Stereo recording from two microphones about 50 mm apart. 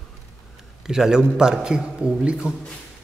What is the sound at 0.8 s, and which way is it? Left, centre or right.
A man's voice, centre.